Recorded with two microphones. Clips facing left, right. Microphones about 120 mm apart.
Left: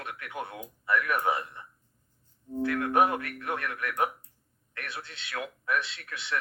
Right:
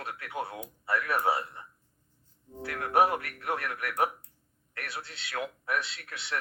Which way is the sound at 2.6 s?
30° right (ahead or behind).